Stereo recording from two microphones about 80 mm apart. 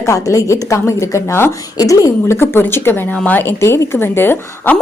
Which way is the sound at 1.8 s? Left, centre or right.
Left.